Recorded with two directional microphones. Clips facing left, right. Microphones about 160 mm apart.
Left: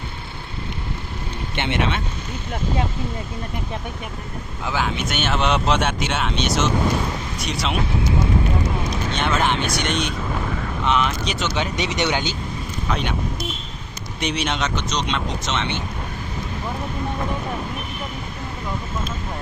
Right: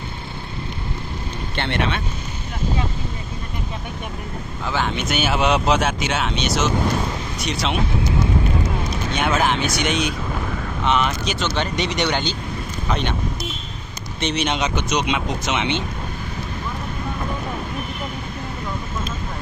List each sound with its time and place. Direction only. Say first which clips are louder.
1.5 s speech: even; 15° left (ahead or behind)
4.6 s speech: right 1 dB; 5° left (ahead or behind)
9.1 s speech: right 2 dB; 5° right (ahead or behind)
14.2 s speech: right 2 dB; 5° left (ahead or behind); by 15.8 s 15° right (ahead or behind)